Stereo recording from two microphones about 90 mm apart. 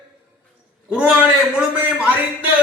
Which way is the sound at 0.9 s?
10° right (ahead or behind).